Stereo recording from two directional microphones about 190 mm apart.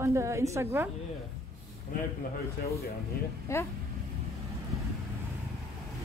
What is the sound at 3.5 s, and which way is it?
Speech, 15° left (ahead or behind).